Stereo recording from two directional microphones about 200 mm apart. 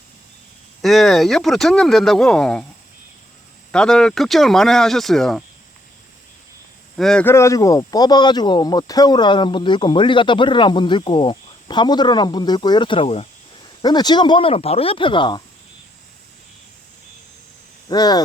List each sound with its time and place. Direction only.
0.8 s speech: centre (ahead or behind)
3.7 s speech: 5° left (ahead or behind)
6.9 s speech: centre (ahead or behind); by 15.4 s 25° left (ahead or behind)
17.8 s speech: 20° left (ahead or behind)